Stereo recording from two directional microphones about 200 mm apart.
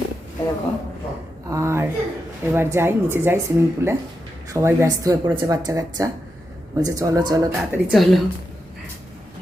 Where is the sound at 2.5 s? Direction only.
10° right (ahead or behind).